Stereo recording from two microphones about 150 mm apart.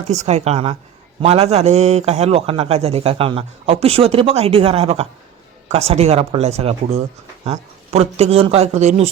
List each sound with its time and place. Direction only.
0.0 s a man's voice: 50° right (ahead or behind)